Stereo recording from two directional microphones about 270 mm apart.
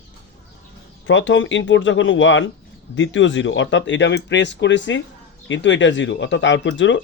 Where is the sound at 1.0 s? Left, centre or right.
Left.